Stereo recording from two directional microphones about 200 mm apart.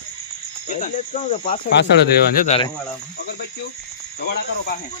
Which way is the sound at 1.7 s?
55° left (ahead or behind).